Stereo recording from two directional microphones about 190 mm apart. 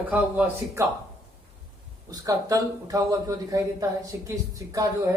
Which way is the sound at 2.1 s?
20° right (ahead or behind).